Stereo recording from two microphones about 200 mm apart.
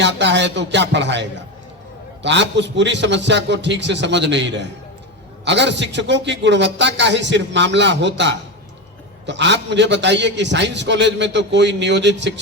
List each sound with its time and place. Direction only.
0.0 s a man's voice: 60° right (ahead or behind)
2.2 s a man's voice: 60° right (ahead or behind)